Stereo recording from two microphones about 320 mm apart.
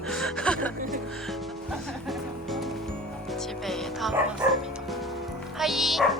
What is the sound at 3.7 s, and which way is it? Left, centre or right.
Bow-wow, centre.